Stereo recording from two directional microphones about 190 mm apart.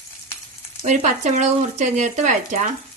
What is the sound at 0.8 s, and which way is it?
A woman's voice, 40° right (ahead or behind).